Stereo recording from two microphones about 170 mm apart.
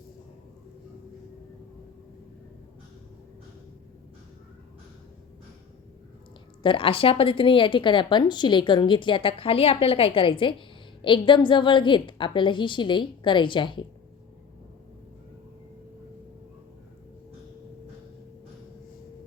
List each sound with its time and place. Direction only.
6.6 s a woman's voice: 30° left (ahead or behind)